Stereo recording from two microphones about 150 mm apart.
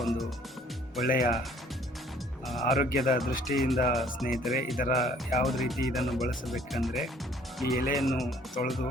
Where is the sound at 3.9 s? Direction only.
Centre (ahead or behind).